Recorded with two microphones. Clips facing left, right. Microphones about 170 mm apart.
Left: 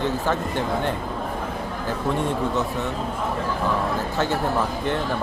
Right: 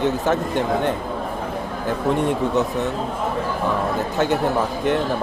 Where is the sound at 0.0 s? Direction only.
20° right (ahead or behind).